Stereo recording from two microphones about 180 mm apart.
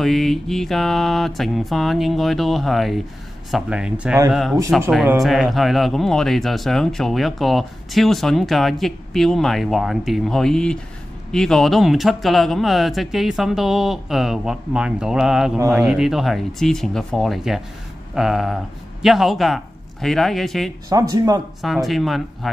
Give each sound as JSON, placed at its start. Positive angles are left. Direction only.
{"t": 0.0, "sound": "speech", "side_deg": 0}
{"t": 20.9, "sound": "speech", "side_deg": -20}
{"t": 21.5, "sound": "speech", "side_deg": 0}